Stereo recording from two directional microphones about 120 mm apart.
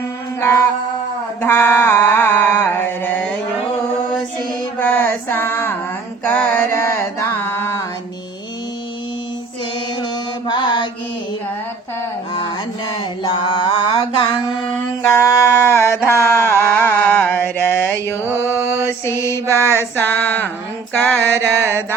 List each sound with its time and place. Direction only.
0.3 s music: 20° left (ahead or behind)
1.4 s mantra: 20° left (ahead or behind)
4.8 s music: 15° left (ahead or behind)
6.2 s mantra: 15° left (ahead or behind)
10.0 s mantra: 40° left (ahead or behind)
12.9 s mantra: 45° left (ahead or behind)
15.0 s a sound: 25° left (ahead or behind)
18.3 s mantra: 20° left (ahead or behind)
19.8 s a sound: 15° left (ahead or behind)
20.9 s music: 10° left (ahead or behind)
21.7 s mantra: 20° right (ahead or behind)